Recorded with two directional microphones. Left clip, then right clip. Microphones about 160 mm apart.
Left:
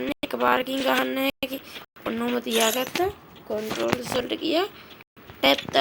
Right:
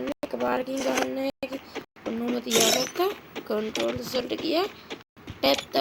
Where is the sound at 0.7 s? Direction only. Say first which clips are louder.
Left 3 dB; 25° left (ahead or behind).